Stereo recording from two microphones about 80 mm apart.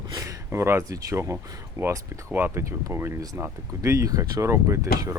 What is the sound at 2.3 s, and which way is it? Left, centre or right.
Speech, right.